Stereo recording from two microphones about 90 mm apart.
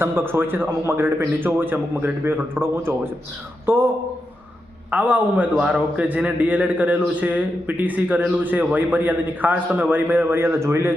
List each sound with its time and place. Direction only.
0.0 s a man's voice: 25° right (ahead or behind)
4.9 s a man's voice: 15° right (ahead or behind)